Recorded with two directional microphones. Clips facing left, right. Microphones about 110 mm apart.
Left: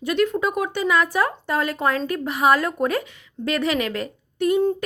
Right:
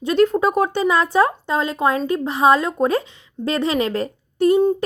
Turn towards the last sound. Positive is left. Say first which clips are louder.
# right 5 dB
turn(degrees=-35)  # may be behind; listen again after turning